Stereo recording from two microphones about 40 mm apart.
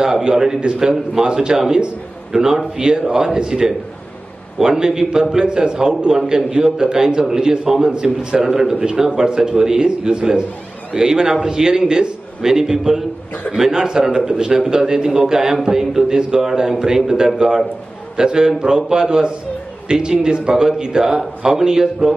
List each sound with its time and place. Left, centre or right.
0.0 s a man's voice: centre